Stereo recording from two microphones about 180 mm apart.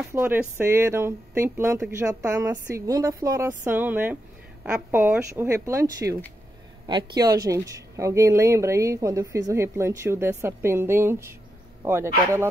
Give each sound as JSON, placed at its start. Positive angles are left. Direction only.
{"t": 0.1, "sound": "speech", "side_deg": -10}